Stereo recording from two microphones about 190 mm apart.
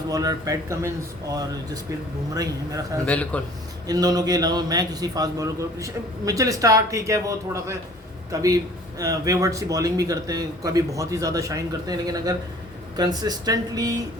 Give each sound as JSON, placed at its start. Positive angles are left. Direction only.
{"t": 0.1, "sound": "a man's voice", "side_deg": -20}
{"t": 3.1, "sound": "a man's voice", "side_deg": 5}
{"t": 3.8, "sound": "a man's voice", "side_deg": -20}